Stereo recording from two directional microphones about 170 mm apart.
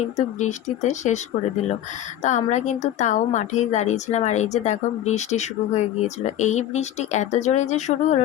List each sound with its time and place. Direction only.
0.3 s a woman's voice: 45° left (ahead or behind)
2.2 s a woman's voice: 45° left (ahead or behind)